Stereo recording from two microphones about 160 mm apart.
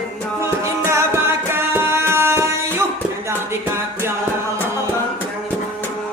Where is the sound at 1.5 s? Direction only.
15° right (ahead or behind).